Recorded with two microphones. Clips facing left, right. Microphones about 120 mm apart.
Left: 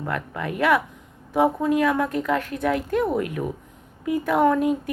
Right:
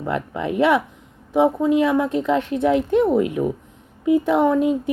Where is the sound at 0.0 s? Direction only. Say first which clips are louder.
Right 4 dB; 20° right (ahead or behind).